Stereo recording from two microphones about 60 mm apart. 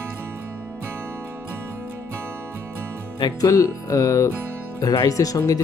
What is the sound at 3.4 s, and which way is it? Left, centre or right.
Speech, left.